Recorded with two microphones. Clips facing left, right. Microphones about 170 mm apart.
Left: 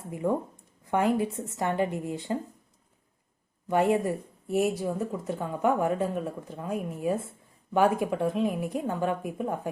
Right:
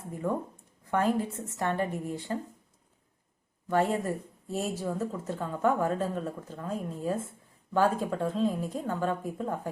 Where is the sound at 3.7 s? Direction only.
15° left (ahead or behind).